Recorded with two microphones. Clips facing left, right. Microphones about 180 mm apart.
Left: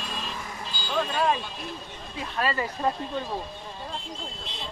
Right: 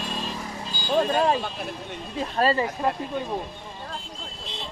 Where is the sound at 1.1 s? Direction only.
40° right (ahead or behind).